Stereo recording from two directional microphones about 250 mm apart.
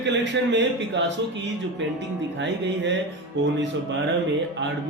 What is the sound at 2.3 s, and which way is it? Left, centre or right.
A man's voice, right.